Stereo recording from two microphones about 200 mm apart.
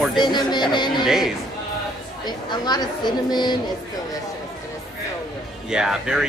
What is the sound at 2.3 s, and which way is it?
Speech, 20° left (ahead or behind).